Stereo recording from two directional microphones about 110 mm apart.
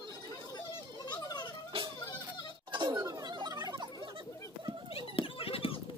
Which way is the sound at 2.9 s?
30° right (ahead or behind).